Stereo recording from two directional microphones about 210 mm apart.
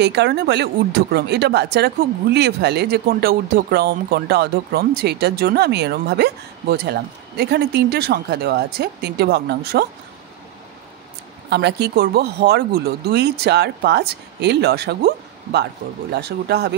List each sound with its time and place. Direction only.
0.0 s speech: 55° right (ahead or behind)
11.5 s speech: 50° right (ahead or behind)